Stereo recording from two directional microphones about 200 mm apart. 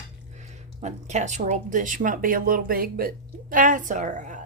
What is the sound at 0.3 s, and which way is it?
A woman's voice, 35° right (ahead or behind).